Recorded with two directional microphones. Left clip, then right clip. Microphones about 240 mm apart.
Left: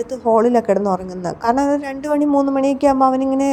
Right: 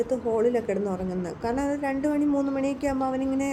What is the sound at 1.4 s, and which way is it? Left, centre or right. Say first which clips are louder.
A woman's voice: left 10 dB; left.